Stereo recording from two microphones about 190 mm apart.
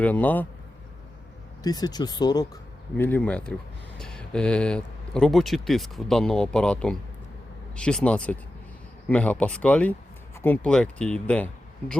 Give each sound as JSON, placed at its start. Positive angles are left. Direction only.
{"t": 0.0, "sound": "speech", "side_deg": 10}
{"t": 1.6, "sound": "speech", "side_deg": 20}
{"t": 3.0, "sound": "speech", "side_deg": 10}